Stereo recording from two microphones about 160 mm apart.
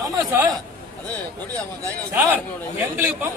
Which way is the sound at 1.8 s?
15° right (ahead or behind).